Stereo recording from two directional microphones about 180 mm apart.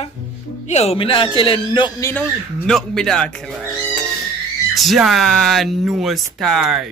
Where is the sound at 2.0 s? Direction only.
5° left (ahead or behind).